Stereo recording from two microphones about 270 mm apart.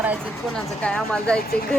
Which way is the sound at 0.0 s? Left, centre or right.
Centre.